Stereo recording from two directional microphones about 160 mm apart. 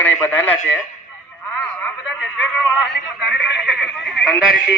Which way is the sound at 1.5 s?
5° left (ahead or behind).